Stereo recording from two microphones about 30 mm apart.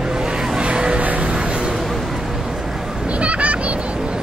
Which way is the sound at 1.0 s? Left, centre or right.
Right.